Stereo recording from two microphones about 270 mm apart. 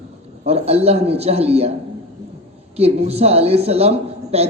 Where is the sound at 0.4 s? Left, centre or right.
Right.